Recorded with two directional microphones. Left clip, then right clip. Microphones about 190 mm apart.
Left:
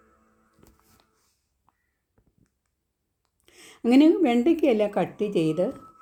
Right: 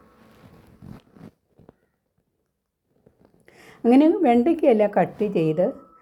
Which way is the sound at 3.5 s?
15° left (ahead or behind).